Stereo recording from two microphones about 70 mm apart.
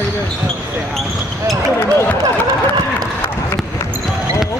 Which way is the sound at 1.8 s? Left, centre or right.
Left.